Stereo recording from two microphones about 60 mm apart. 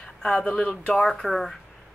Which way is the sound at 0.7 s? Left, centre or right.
Centre.